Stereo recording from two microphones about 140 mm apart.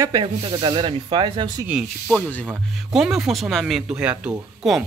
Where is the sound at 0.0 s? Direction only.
35° right (ahead or behind).